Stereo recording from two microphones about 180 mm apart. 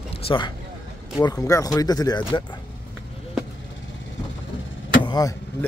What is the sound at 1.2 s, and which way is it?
Speech, 20° left (ahead or behind).